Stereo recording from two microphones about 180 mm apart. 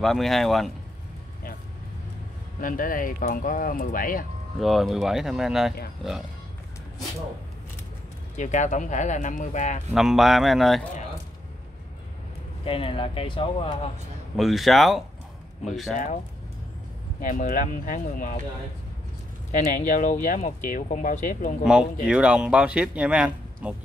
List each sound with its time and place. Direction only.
0.0 s speech: centre (ahead or behind)
2.6 s speech: 50° left (ahead or behind)
4.6 s speech: centre (ahead or behind)
8.4 s speech: 45° left (ahead or behind)
9.9 s speech: centre (ahead or behind)
12.6 s speech: 30° left (ahead or behind)
14.3 s speech: centre (ahead or behind)
17.2 s speech: 45° left (ahead or behind)
19.5 s speech: 40° left (ahead or behind)
21.6 s speech: 5° right (ahead or behind)